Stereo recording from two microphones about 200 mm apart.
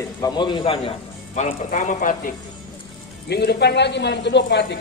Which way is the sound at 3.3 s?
55° left (ahead or behind).